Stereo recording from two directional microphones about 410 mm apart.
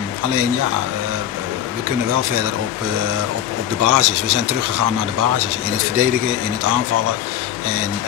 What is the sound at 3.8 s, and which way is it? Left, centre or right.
Speech, right.